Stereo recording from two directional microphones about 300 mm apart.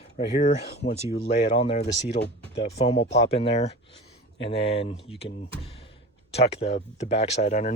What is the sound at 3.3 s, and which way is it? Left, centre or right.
Speech, centre.